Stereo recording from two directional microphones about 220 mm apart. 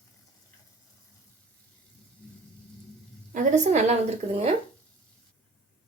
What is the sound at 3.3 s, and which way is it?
A woman's voice, 30° right (ahead or behind).